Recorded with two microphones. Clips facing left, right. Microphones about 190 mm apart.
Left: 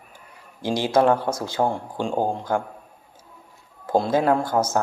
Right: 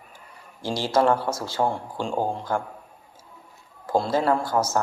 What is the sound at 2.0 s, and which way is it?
Speech, 15° left (ahead or behind).